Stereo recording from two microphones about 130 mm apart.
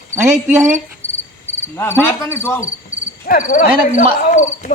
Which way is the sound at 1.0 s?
20° right (ahead or behind).